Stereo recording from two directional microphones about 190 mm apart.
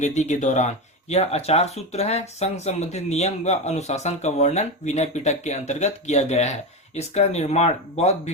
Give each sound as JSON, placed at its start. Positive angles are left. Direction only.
{"t": 0.0, "sound": "speech", "side_deg": 35}